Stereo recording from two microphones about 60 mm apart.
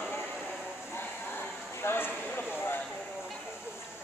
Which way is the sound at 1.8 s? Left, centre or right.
Left.